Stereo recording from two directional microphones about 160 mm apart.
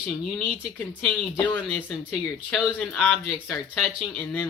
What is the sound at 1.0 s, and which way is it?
Speech, 10° left (ahead or behind).